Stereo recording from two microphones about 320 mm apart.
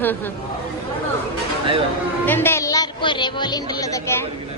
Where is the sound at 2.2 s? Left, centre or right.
Centre.